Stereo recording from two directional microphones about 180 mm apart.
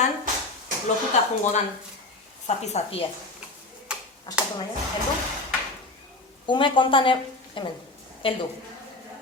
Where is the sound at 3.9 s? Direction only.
5° right (ahead or behind).